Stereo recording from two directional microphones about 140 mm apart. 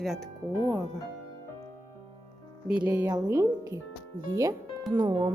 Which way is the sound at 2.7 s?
10° right (ahead or behind).